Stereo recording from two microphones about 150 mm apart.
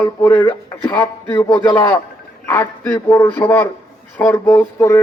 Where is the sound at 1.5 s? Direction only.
30° left (ahead or behind).